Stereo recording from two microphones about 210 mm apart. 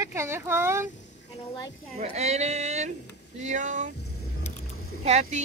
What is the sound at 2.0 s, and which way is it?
Speech, 30° right (ahead or behind).